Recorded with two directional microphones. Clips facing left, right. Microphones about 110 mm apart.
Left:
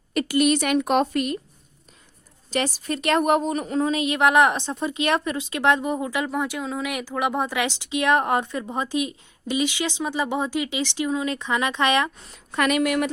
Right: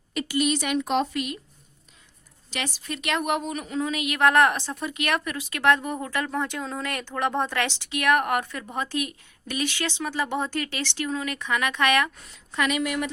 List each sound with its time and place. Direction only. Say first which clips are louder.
0.1 s a woman's voice: left 5 dB; 50° left (ahead or behind)
2.5 s a woman's voice: left 7 dB; 40° left (ahead or behind)
4.2 s speech: left 1 dB; 15° left (ahead or behind)
12.5 s a woman's voice: left 4 dB; 55° left (ahead or behind)